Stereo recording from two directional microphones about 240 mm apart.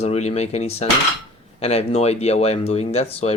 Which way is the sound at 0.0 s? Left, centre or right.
Left.